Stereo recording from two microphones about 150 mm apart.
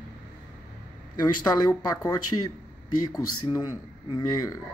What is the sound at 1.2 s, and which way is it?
Speech, 25° left (ahead or behind).